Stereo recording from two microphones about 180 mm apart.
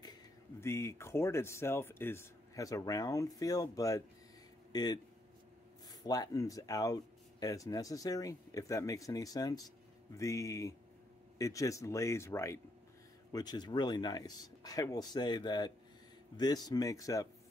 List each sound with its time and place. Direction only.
0.0 s speech: 20° left (ahead or behind)
6.0 s speech: 20° left (ahead or behind)